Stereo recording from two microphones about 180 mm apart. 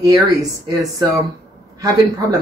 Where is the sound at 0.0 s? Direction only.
20° right (ahead or behind).